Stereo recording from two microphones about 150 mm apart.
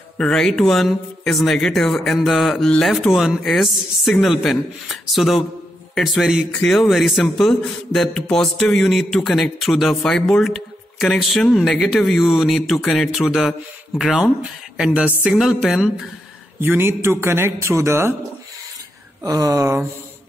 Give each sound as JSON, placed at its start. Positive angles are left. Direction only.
{"t": 0.2, "sound": "a man's voice", "side_deg": 5}
{"t": 16.5, "sound": "a man's voice", "side_deg": -15}
{"t": 19.2, "sound": "speech", "side_deg": -25}